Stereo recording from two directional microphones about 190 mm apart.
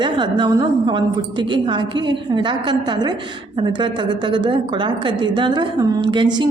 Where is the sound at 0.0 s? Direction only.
25° right (ahead or behind).